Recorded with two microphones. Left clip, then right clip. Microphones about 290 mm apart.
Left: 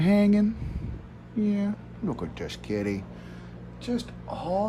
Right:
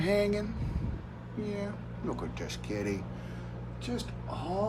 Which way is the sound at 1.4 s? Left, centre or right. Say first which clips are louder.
Left 6 dB; left.